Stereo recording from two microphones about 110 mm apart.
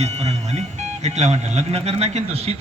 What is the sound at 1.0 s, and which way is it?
A man's voice, 90° right.